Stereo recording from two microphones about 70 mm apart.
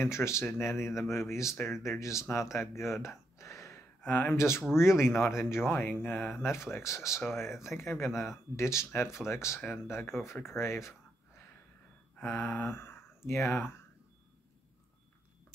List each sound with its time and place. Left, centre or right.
0.0 s speech: left
3.3 s gasp: left
4.0 s speech: left
4.4 s speech: left
8.1 s speech: centre
8.5 s speech: left
12.3 s a sound: left
12.6 s speech: left